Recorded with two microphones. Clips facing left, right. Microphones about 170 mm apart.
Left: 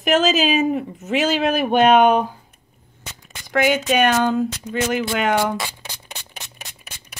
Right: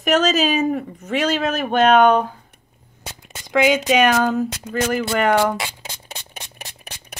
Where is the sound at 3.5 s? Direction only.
10° right (ahead or behind).